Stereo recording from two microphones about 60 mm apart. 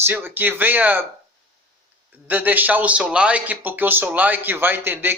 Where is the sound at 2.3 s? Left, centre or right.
Right.